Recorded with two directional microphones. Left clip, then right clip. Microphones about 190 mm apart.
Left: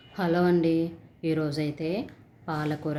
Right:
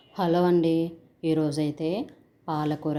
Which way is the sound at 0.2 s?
20° right (ahead or behind).